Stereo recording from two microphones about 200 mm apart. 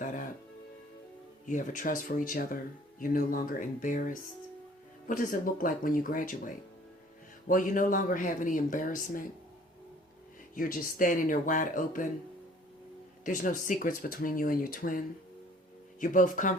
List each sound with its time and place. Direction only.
1.5 s speech: 40° left (ahead or behind)
10.5 s speech: 45° left (ahead or behind)
13.2 s speech: 40° left (ahead or behind)